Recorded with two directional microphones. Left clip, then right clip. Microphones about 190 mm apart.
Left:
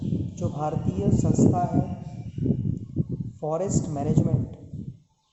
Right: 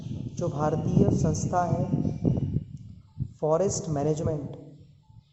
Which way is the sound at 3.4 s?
20° right (ahead or behind).